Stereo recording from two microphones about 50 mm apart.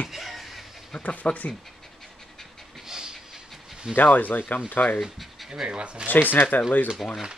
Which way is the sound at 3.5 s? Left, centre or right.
Centre.